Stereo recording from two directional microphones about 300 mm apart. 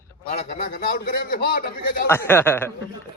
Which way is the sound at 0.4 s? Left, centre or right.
Left.